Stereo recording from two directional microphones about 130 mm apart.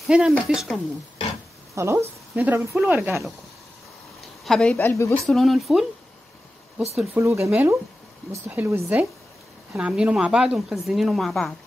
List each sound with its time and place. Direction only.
0.0 s speech: 5° right (ahead or behind)
1.8 s speech: 20° right (ahead or behind)
4.2 s a sound: 5° left (ahead or behind)
4.7 s a woman's voice: 20° left (ahead or behind)
5.1 s speech: centre (ahead or behind)
7.2 s speech: 20° right (ahead or behind); by 11.5 s centre (ahead or behind)